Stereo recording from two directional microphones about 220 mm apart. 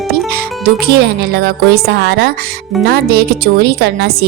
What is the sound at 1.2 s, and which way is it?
Music, 45° right (ahead or behind).